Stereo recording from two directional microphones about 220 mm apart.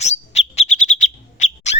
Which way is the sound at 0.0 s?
30° left (ahead or behind).